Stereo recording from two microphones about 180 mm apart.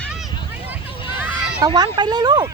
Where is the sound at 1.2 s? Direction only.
10° right (ahead or behind).